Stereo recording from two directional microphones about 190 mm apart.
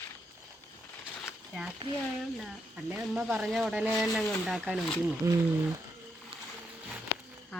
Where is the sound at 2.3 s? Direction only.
5° right (ahead or behind).